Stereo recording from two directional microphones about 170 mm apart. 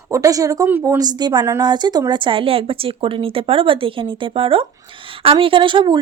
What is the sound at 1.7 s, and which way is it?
A woman's voice, 25° right (ahead or behind).